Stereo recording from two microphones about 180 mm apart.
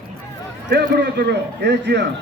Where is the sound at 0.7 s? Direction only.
70° right (ahead or behind).